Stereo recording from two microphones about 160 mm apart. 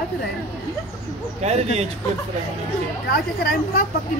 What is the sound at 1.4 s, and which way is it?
Speech, 45° right (ahead or behind).